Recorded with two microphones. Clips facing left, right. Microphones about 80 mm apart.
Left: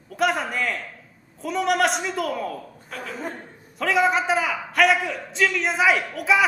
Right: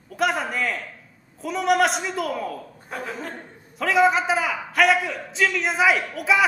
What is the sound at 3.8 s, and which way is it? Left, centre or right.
A man's voice, centre.